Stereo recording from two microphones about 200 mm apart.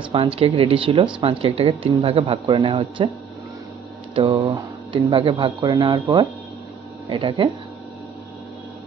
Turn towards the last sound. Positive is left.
turn(degrees=-25)  # may be behind; listen again after turning